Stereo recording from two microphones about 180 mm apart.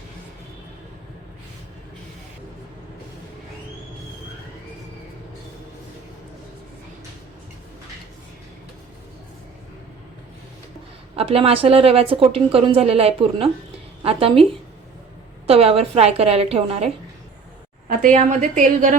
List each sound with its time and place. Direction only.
11.2 s a woman's voice: 30° right (ahead or behind)
15.4 s a woman's voice: 35° right (ahead or behind)
18.1 s a woman's voice: 40° right (ahead or behind)